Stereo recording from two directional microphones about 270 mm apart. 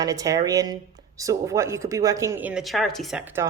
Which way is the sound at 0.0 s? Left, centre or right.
Centre.